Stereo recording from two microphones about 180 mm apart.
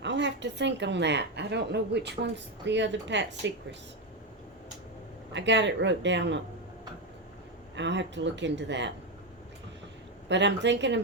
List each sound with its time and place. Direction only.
0.0 s a woman's voice: 80° right
5.3 s speech: 80° right
7.8 s speech: 80° right
10.2 s a woman's voice: 80° right